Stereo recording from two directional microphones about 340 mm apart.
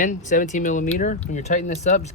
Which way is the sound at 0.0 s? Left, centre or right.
Left.